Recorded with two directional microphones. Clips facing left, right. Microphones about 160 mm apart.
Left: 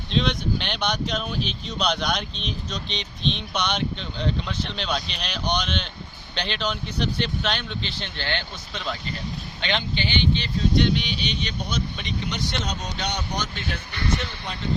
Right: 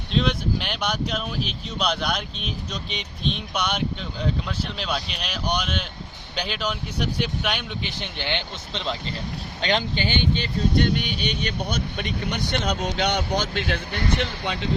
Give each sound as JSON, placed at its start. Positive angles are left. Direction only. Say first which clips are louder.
{"t": 0.1, "sound": "speech", "louder": "right 1 dB", "side_deg": -5}
{"t": 9.6, "sound": "speech", "louder": "right 3 dB", "side_deg": -40}